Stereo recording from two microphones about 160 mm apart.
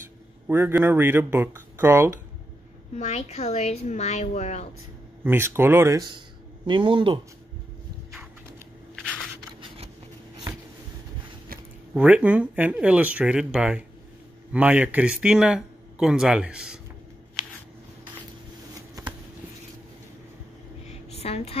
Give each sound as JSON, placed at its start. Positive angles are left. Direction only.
{"t": 0.5, "sound": "speech", "side_deg": -15}
{"t": 3.0, "sound": "a woman's voice", "side_deg": 45}
{"t": 5.2, "sound": "speech", "side_deg": -15}
{"t": 11.9, "sound": "speech", "side_deg": -10}
{"t": 18.8, "sound": "shuffling cards", "side_deg": -20}
{"t": 20.8, "sound": "a sound", "side_deg": 40}